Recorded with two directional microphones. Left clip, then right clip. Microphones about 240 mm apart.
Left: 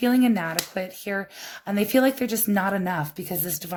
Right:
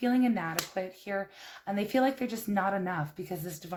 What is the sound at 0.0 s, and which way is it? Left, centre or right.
Speech, left.